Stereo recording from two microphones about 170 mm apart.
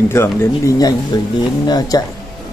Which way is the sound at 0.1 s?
15° left (ahead or behind).